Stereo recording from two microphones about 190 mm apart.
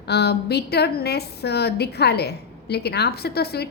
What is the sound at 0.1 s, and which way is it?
A woman's voice, 60° left (ahead or behind).